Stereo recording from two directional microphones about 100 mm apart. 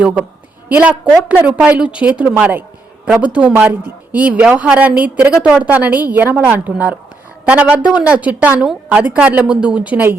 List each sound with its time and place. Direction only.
0.0 s a woman's voice: 15° right (ahead or behind)